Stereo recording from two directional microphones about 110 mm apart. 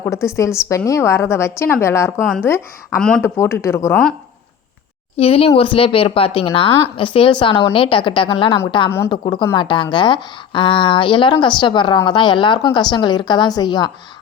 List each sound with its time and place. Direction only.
0.0 s speech: 25° left (ahead or behind)
3.0 s speech: 5° left (ahead or behind)
3.2 s speech: 25° left (ahead or behind)
5.1 s a woman's voice: 60° left (ahead or behind); by 13.9 s 40° left (ahead or behind)